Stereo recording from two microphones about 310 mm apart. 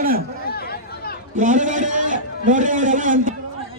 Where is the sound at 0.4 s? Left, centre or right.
Left.